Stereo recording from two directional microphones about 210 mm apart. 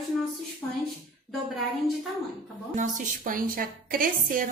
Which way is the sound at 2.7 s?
35° right (ahead or behind).